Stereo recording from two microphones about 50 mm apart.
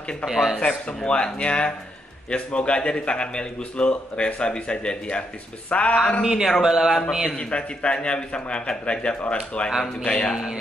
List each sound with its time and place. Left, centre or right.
0.2 s speech: centre
0.6 s a man's voice: left
6.2 s speech: centre
7.3 s a man's voice: left
10.0 s a sound: centre
10.3 s speech: centre